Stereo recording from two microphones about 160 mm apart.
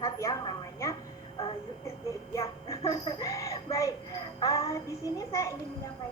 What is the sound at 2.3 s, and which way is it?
A child's voice, 20° left (ahead or behind).